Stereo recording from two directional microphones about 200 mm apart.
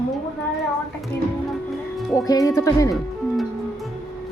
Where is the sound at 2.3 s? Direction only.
15° left (ahead or behind).